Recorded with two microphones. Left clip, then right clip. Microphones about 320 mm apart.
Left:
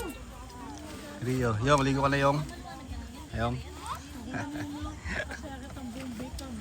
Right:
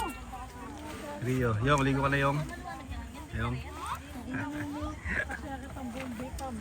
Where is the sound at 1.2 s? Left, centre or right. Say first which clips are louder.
Left 1 dB; centre.